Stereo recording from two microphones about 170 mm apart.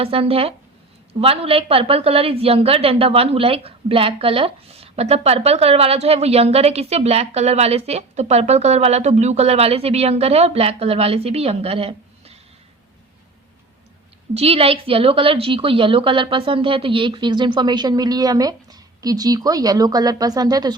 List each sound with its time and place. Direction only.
0.0 s a woman's voice: 35° right (ahead or behind)
14.3 s a woman's voice: 35° right (ahead or behind)